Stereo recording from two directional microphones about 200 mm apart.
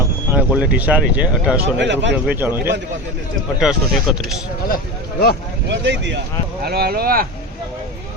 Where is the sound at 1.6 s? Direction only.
60° right (ahead or behind).